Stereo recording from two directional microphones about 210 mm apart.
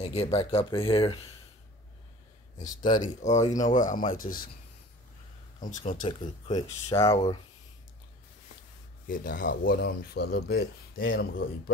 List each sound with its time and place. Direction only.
0.0 s speech: 30° left (ahead or behind)
3.0 s speech: 35° left (ahead or behind)
5.6 s speech: 35° left (ahead or behind); by 7.2 s 15° left (ahead or behind)
9.0 s speech: 40° left (ahead or behind); by 11.4 s 65° left (ahead or behind)